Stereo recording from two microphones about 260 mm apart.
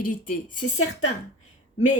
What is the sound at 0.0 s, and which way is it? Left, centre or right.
Speech, left.